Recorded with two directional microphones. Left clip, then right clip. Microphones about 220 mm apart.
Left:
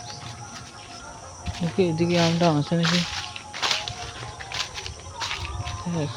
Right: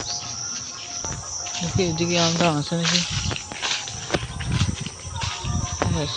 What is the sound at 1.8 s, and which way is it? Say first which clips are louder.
Speech: even; 15° left (ahead or behind).